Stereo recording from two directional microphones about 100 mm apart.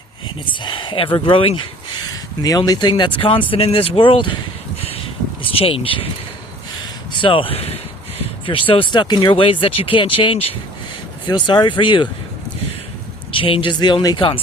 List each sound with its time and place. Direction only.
0.4 s speech: 55° left (ahead or behind)
2.0 s speech: 40° left (ahead or behind); by 4.4 s 55° left (ahead or behind)
4.8 s a sound: 75° left (ahead or behind)
7.1 s speech: 55° left (ahead or behind); by 7.8 s 85° left
8.4 s speech: 60° left (ahead or behind)
11.3 s speech: 50° left (ahead or behind)
13.3 s speech: 60° left (ahead or behind); by 14.2 s 45° left (ahead or behind)